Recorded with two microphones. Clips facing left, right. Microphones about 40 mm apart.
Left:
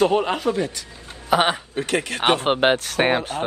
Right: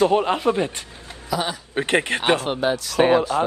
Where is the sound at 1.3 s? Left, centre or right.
Left.